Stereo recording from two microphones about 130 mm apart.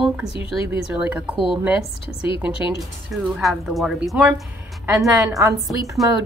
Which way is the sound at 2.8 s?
Centre (ahead or behind).